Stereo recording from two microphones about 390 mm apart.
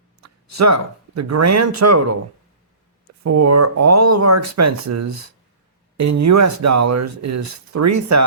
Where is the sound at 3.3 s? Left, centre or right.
Right.